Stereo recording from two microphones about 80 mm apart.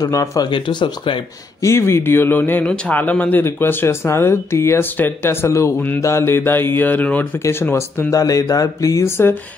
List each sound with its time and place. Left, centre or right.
0.0 s speech: left
0.5 s speech: left
1.6 s speech: left
3.4 s speech: left
7.6 s speech: left